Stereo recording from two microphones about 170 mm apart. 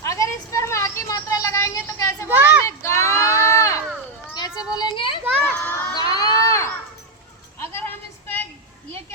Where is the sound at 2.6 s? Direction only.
15° left (ahead or behind).